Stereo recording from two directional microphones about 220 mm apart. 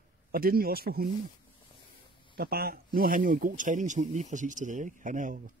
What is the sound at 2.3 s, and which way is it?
A man's voice, 45° right (ahead or behind).